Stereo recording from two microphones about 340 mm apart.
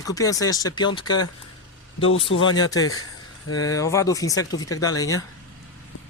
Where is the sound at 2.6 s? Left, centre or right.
Centre.